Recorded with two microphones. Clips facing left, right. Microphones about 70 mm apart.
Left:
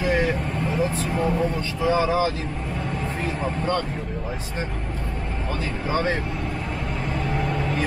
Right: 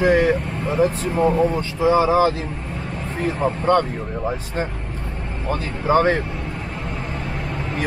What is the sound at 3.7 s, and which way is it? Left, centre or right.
Speech, right.